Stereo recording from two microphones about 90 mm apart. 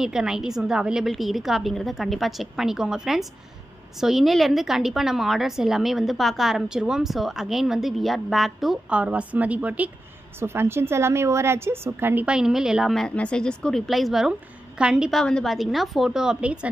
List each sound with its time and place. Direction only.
0.0 s a woman's voice: 5° right (ahead or behind)
8.9 s a woman's voice: 15° right (ahead or behind)
10.4 s a woman's voice: 25° right (ahead or behind)
12.3 s a woman's voice: 5° right (ahead or behind)
13.1 s a woman's voice: 10° left (ahead or behind); by 15.0 s 10° right (ahead or behind)
15.0 s a woman's voice: 5° left (ahead or behind); by 16.5 s 10° right (ahead or behind)